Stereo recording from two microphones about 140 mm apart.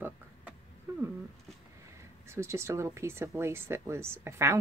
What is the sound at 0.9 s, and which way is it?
Cat, 20° right (ahead or behind).